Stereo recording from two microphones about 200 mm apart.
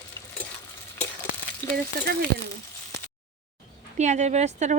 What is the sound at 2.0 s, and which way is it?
Speech, 45° right (ahead or behind).